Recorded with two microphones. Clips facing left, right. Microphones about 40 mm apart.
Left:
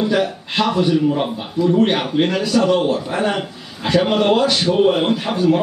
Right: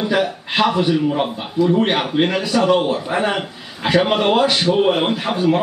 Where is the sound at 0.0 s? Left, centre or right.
Centre.